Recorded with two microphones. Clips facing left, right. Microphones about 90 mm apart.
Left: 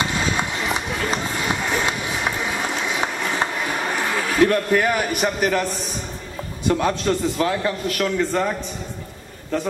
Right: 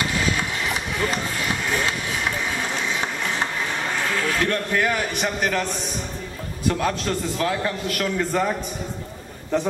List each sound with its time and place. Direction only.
0.0 s run: 25° left (ahead or behind); by 5.7 s 5° left (ahead or behind)
6.7 s a man's voice: 5° left (ahead or behind)
9.5 s a man's voice: 15° right (ahead or behind)